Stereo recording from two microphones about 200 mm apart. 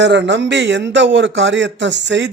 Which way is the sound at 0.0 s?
60° right (ahead or behind).